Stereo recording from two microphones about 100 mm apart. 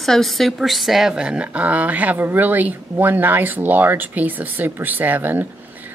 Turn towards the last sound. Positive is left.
turn(degrees=-20)  # may be behind; listen again after turning